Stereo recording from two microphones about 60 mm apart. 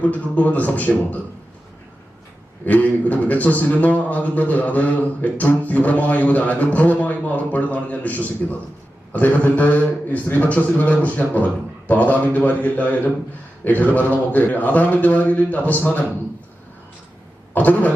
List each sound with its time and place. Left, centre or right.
0.0 s a man's voice: left
2.6 s a man's voice: left
17.5 s a sound: left